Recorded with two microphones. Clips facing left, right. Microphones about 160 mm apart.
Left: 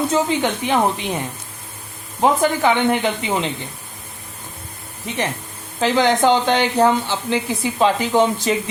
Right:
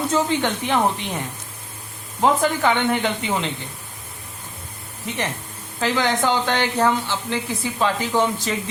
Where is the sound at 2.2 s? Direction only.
15° left (ahead or behind).